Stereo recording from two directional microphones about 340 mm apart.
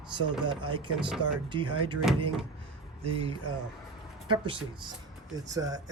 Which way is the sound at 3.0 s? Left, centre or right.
Centre.